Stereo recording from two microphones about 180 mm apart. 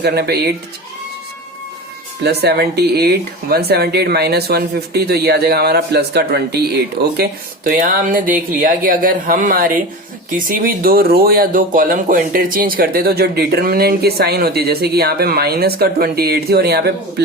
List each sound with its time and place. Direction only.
0.0 s speech: 60° right (ahead or behind)
2.2 s speech: 65° right (ahead or behind)
7.2 s speech: 55° right (ahead or behind)